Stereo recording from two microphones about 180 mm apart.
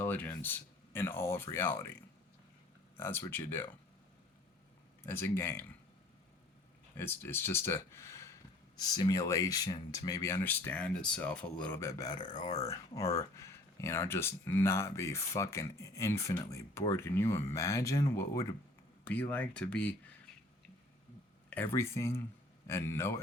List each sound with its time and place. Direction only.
0.0 s speech: 10° left (ahead or behind)
3.0 s speech: 15° left (ahead or behind)
5.0 s speech: 15° left (ahead or behind)
6.9 s speech: 10° left (ahead or behind)
21.5 s speech: 10° left (ahead or behind)